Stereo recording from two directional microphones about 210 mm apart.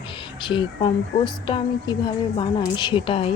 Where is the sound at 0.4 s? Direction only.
25° left (ahead or behind).